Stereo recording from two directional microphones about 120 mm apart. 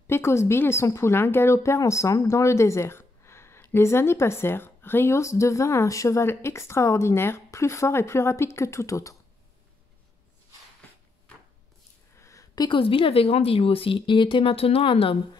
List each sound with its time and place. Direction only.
0.0 s a woman's voice: 20° left (ahead or behind)
12.2 s a woman's voice: 25° left (ahead or behind); by 15.1 s 50° left (ahead or behind)